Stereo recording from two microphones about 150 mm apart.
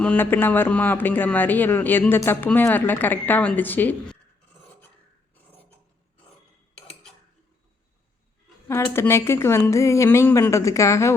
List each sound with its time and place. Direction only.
0.0 s a man's voice: 10° left (ahead or behind)
8.6 s a woman's voice: 20° left (ahead or behind)